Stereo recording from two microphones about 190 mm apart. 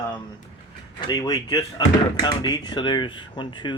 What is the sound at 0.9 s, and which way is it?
Speech, 20° left (ahead or behind).